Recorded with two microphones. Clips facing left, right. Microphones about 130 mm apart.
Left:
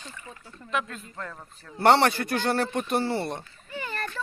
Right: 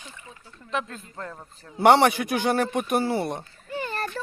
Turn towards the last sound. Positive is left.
turn(degrees=-30)  # may be behind; listen again after turning